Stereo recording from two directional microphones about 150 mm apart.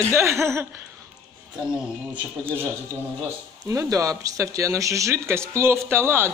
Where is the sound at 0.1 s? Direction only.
20° right (ahead or behind).